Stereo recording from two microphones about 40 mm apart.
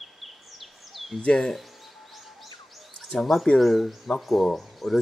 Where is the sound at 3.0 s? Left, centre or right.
Centre.